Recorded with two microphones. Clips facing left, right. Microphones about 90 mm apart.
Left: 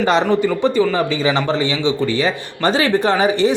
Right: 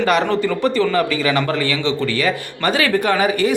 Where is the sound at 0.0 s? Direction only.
20° left (ahead or behind).